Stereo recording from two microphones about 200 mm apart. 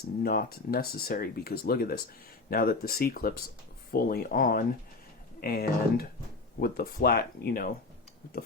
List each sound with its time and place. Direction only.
0.2 s speech: 50° left (ahead or behind)